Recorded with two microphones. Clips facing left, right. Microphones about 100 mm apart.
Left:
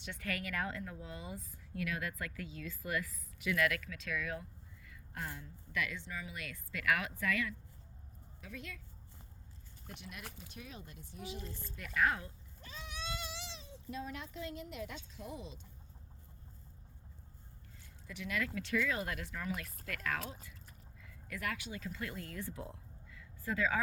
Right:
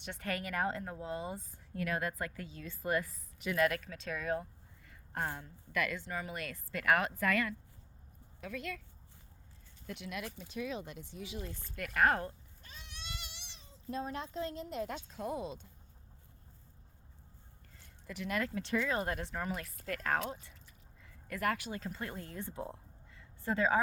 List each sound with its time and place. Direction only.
0.2 s a woman's voice: 35° right (ahead or behind)
5.4 s speech: 50° right (ahead or behind)
8.4 s speech: 65° right (ahead or behind)
9.8 s speech: 85° right; by 12.3 s 50° right (ahead or behind)
13.3 s a sound: 90° left
13.9 s a woman's voice: 35° right (ahead or behind)
18.0 s a woman's voice: 45° right (ahead or behind)
18.6 s a woman's voice: 30° right (ahead or behind)
21.0 s speech: 45° right (ahead or behind)